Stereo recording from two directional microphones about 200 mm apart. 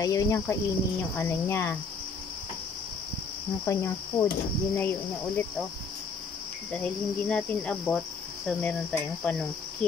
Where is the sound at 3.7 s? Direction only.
15° left (ahead or behind).